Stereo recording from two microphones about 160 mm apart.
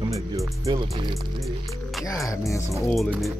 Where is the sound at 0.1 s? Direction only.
20° right (ahead or behind).